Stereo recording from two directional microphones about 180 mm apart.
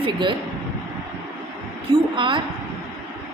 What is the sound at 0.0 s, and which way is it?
Speech, 25° right (ahead or behind).